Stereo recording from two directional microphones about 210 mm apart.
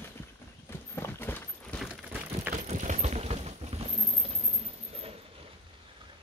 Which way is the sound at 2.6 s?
35° right (ahead or behind).